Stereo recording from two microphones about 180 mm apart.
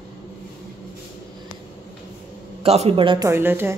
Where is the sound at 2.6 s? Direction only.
35° right (ahead or behind).